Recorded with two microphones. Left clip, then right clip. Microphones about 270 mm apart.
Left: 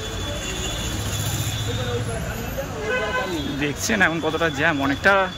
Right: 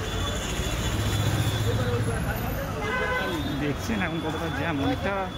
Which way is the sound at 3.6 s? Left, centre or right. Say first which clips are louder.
Left 9 dB; centre.